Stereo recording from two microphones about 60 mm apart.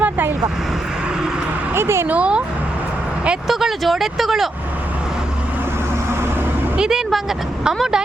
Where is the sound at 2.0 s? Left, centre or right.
Right.